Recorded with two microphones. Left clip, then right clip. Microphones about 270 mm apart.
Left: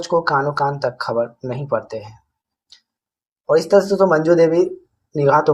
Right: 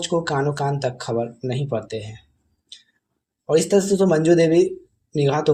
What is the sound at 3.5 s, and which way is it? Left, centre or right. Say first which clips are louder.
Speech: left 4 dB; right.